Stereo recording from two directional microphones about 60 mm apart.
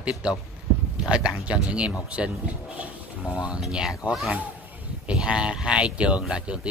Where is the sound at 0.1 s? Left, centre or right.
Centre.